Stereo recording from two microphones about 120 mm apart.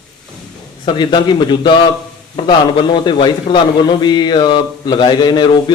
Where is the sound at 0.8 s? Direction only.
40° left (ahead or behind).